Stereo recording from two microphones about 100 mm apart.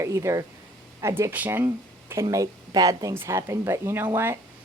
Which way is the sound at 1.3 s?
20° right (ahead or behind).